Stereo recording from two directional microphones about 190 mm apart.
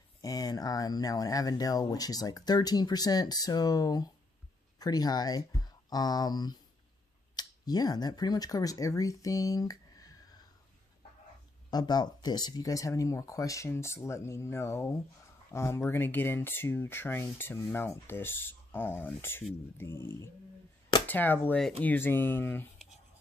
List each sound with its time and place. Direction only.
0.2 s speech: 20° left (ahead or behind)
11.7 s speech: 20° left (ahead or behind)